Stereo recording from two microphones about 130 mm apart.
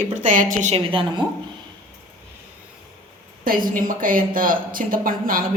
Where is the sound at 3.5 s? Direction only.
90° right.